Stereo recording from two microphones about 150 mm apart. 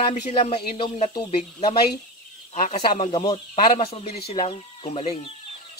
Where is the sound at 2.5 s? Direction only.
50° left (ahead or behind).